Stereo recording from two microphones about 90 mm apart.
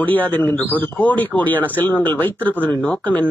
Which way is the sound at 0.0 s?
20° left (ahead or behind).